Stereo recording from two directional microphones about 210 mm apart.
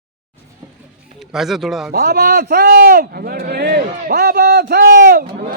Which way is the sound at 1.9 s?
50° right (ahead or behind).